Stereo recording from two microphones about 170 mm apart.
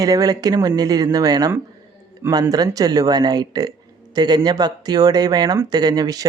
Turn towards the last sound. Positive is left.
turn(degrees=-20)  # may be behind; listen again after turning